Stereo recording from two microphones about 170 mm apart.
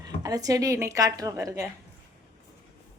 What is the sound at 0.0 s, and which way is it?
Speech, 20° right (ahead or behind).